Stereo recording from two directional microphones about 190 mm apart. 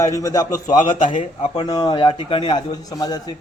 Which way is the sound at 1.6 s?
20° left (ahead or behind).